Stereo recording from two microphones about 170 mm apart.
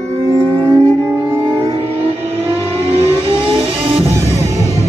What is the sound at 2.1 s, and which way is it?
Vehicle, 10° right (ahead or behind).